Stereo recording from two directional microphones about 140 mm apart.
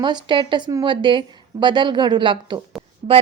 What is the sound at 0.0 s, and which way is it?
A woman's voice, 35° right (ahead or behind).